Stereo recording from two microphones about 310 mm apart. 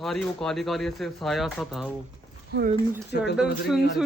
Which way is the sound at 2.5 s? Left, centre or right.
Right.